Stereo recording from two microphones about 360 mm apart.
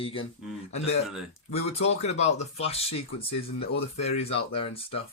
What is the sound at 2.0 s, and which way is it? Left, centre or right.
Speech, centre.